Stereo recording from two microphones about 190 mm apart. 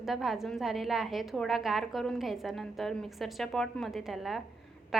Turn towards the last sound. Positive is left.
turn(degrees=0)  # may be behind; listen again after turning